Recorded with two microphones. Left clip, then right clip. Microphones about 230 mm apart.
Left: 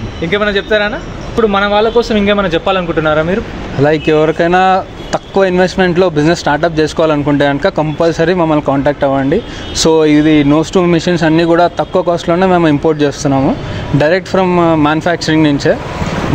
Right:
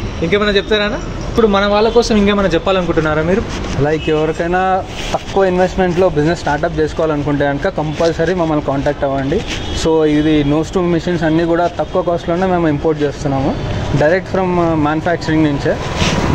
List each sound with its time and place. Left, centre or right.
0.2 s a man's voice: centre
3.8 s speech: left